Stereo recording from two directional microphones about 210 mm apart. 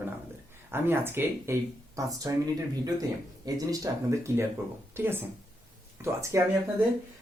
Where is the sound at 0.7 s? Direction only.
10° right (ahead or behind).